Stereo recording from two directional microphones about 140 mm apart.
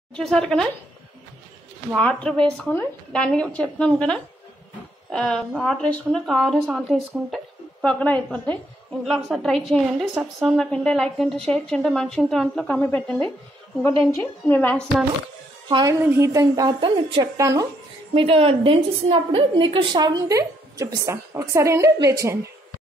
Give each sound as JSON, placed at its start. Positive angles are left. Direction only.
{"t": 0.1, "sound": "a woman's voice", "side_deg": 5}
{"t": 2.0, "sound": "a woman's voice", "side_deg": 10}
{"t": 9.0, "sound": "a woman's voice", "side_deg": 0}
{"t": 15.7, "sound": "a woman's voice", "side_deg": -30}
{"t": 16.0, "sound": "a woman's voice", "side_deg": -15}
{"t": 16.8, "sound": "a woman's voice", "side_deg": -40}
{"t": 17.4, "sound": "a woman's voice", "side_deg": -25}
{"t": 18.1, "sound": "a woman's voice", "side_deg": -40}